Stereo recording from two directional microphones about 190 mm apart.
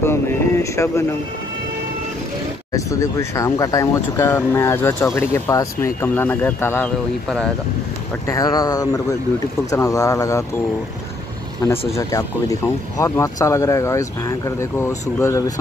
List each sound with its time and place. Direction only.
0.0 s speech: 15° left (ahead or behind)
2.7 s speech: 15° left (ahead or behind)
8.3 s speech: 20° left (ahead or behind)
11.9 s speech: 15° left (ahead or behind)